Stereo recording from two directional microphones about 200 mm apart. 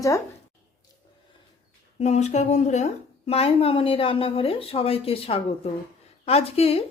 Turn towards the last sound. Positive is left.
turn(degrees=30)  # may be behind; listen again after turning